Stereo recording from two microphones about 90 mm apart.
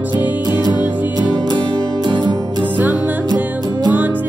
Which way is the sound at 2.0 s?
55° right (ahead or behind).